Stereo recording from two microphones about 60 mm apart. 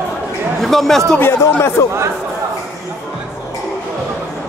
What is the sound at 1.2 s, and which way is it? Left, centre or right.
Speech, left.